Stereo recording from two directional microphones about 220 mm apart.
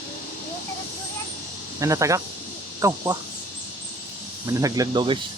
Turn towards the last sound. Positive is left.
turn(degrees=-20)  # may be behind; listen again after turning